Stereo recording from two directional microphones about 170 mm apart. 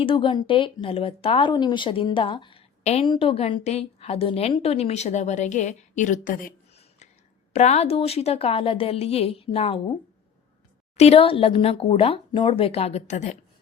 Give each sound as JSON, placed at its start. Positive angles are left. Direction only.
{"t": 0.0, "sound": "speech", "side_deg": 30}
{"t": 7.5, "sound": "speech", "side_deg": 40}
{"t": 10.9, "sound": "speech", "side_deg": 35}